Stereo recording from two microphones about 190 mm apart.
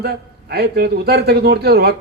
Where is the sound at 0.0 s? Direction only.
55° right (ahead or behind).